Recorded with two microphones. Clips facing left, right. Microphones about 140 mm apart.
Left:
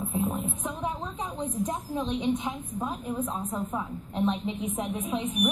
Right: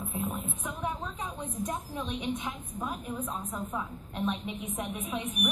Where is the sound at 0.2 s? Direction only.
25° left (ahead or behind).